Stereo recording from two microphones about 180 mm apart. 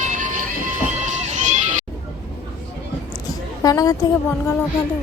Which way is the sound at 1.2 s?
40° right (ahead or behind).